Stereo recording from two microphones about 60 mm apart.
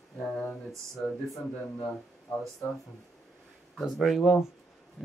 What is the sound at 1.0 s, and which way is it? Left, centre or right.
Speech, left.